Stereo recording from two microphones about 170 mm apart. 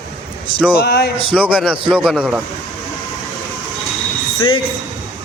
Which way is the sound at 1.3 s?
5° right (ahead or behind).